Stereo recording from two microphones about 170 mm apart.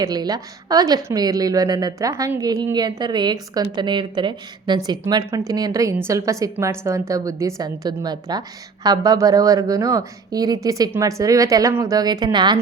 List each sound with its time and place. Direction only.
0.0 s a woman's voice: 20° right (ahead or behind)